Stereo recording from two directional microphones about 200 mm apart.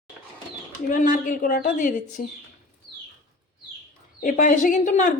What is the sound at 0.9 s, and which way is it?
Speech, 40° left (ahead or behind).